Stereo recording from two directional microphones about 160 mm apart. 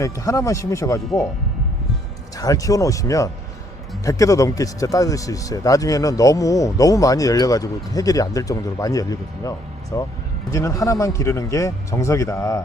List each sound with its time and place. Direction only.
0.0 s speech: 20° left (ahead or behind)
2.3 s speech: 20° left (ahead or behind)